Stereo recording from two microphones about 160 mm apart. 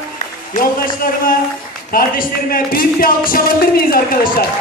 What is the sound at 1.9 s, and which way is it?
Music, 65° left (ahead or behind).